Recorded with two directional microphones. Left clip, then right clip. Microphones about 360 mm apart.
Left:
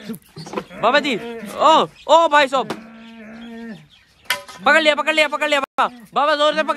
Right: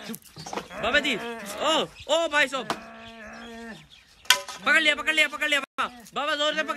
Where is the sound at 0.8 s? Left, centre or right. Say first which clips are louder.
Left 8 dB; centre.